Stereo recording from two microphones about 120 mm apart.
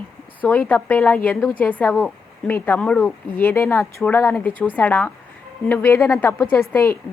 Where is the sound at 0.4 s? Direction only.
15° left (ahead or behind).